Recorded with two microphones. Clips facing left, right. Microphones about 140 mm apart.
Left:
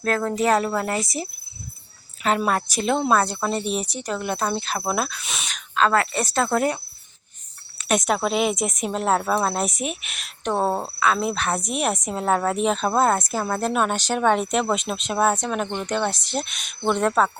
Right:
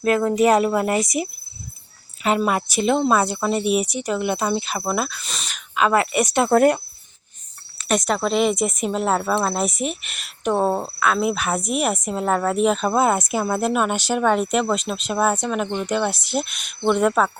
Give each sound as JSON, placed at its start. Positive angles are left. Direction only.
{"t": 0.0, "sound": "speech", "side_deg": -10}
{"t": 2.2, "sound": "speech", "side_deg": -5}
{"t": 5.7, "sound": "speech", "side_deg": -15}
{"t": 7.9, "sound": "speech", "side_deg": 0}